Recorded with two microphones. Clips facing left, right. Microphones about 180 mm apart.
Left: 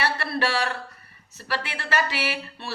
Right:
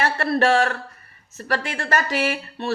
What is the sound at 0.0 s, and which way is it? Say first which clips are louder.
Speech: right 6 dB; 45° right (ahead or behind).